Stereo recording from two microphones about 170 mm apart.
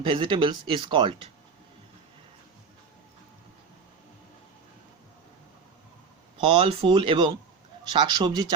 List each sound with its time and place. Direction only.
0.0 s speech: 30° right (ahead or behind)
6.4 s speech: 30° right (ahead or behind)